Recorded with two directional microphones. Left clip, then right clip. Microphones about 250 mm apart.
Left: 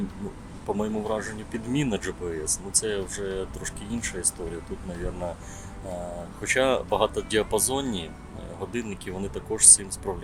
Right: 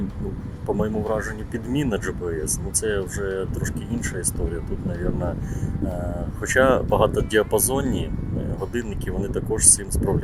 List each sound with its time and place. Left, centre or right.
0.8 s speech: centre
6.5 s speech: centre